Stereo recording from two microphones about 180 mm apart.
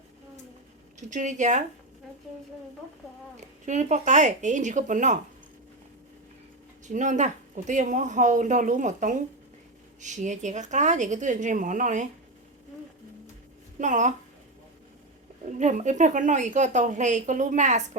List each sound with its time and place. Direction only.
0.9 s speech: 45° right (ahead or behind)
3.3 s speech: 40° right (ahead or behind)
6.8 s speech: 45° right (ahead or behind)
13.7 s speech: 45° right (ahead or behind)
15.5 s speech: 40° right (ahead or behind)